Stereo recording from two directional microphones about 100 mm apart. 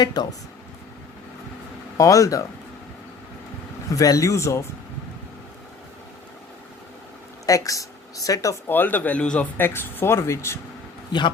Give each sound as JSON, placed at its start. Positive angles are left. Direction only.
{"t": 0.0, "sound": "speech", "side_deg": 45}
{"t": 2.0, "sound": "speech", "side_deg": 35}
{"t": 3.9, "sound": "speech", "side_deg": 35}
{"t": 7.4, "sound": "speech", "side_deg": 35}
{"t": 8.6, "sound": "speech", "side_deg": 20}
{"t": 9.6, "sound": "speech", "side_deg": 20}
{"t": 11.1, "sound": "speech", "side_deg": 45}